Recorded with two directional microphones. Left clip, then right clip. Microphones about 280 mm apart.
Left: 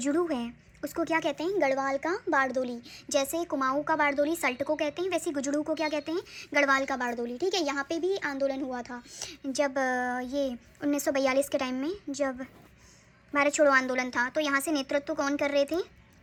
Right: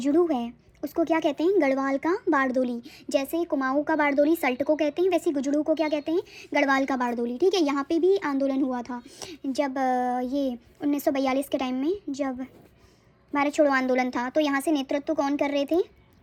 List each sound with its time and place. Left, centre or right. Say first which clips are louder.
0.3 s a woman's voice: right 5 dB; centre
2.0 s speech: right 4 dB; right
2.4 s a woman's voice: right 3 dB; centre
13.3 s a woman's voice: right 1 dB; centre